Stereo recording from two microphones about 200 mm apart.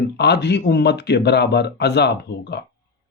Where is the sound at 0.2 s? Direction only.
55° left (ahead or behind).